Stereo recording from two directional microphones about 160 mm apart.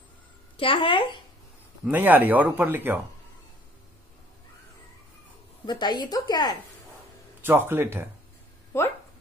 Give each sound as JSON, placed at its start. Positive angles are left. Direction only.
{"t": 0.6, "sound": "speech", "side_deg": 35}
{"t": 1.9, "sound": "speech", "side_deg": -10}
{"t": 5.7, "sound": "a woman's voice", "side_deg": 25}
{"t": 7.4, "sound": "speech", "side_deg": -15}
{"t": 8.7, "sound": "speech", "side_deg": 15}